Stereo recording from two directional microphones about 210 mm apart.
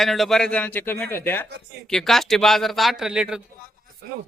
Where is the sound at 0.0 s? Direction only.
Centre (ahead or behind).